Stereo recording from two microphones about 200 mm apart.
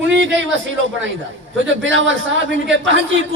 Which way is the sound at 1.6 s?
70° right (ahead or behind).